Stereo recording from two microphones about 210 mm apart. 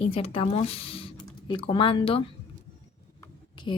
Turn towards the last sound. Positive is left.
turn(degrees=20)  # may be behind; listen again after turning